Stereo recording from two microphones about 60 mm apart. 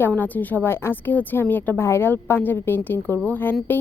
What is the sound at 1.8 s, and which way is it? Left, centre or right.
Speech, left.